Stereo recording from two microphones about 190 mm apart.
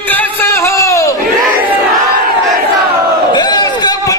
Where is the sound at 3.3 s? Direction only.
20° left (ahead or behind).